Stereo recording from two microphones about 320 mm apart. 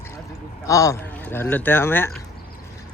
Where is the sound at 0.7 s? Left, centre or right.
Centre.